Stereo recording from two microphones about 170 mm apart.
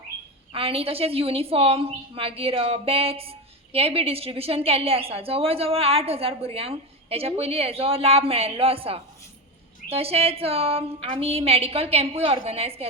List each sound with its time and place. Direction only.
0.5 s a woman's voice: 35° right (ahead or behind)